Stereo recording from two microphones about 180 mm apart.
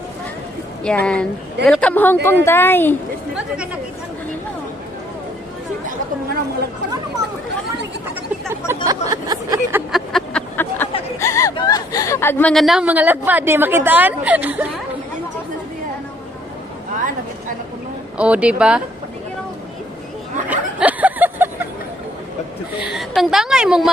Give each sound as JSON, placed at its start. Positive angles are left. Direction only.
{"t": 0.8, "sound": "a woman's voice", "side_deg": 5}
{"t": 8.7, "sound": "a woman's voice", "side_deg": -15}
{"t": 9.9, "sound": "a sound", "side_deg": 5}
{"t": 11.1, "sound": "chatter", "side_deg": 15}
{"t": 11.5, "sound": "a woman's voice", "side_deg": 20}
{"t": 18.1, "sound": "a woman's voice", "side_deg": -5}
{"t": 20.4, "sound": "a sound", "side_deg": -10}
{"t": 22.8, "sound": "a woman's voice", "side_deg": 0}